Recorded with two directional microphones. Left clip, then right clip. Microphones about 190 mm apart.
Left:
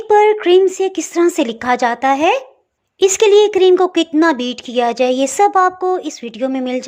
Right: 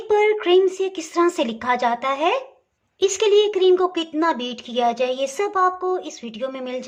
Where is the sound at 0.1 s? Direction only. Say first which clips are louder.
Left 7 dB; 25° left (ahead or behind).